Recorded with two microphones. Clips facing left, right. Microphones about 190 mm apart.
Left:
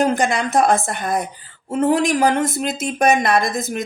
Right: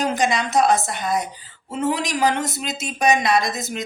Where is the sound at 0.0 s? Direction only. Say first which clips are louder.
Left 3 dB; 55° left (ahead or behind).